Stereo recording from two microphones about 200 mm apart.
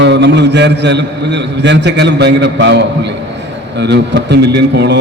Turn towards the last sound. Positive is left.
turn(degrees=-60)  # may be behind; listen again after turning